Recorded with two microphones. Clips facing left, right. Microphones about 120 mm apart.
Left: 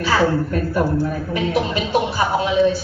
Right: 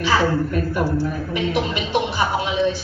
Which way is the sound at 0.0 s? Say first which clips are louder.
Left 1 dB; 40° left (ahead or behind).